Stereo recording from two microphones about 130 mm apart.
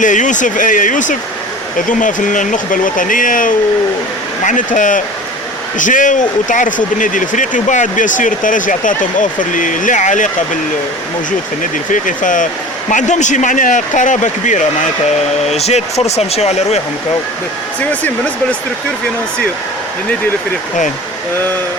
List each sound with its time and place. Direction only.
0.0 s speech: 75° left (ahead or behind)
4.4 s speech: 80° left
11.9 s speech: 90° left
12.9 s speech: 70° left (ahead or behind)
15.4 s speech: 55° left (ahead or behind)